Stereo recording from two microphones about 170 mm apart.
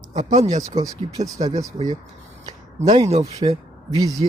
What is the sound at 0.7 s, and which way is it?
Speech, 20° right (ahead or behind).